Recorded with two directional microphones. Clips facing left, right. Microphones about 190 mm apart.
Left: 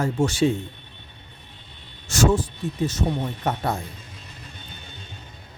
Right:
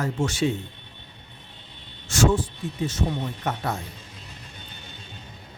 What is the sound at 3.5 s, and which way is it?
Speech, 30° left (ahead or behind).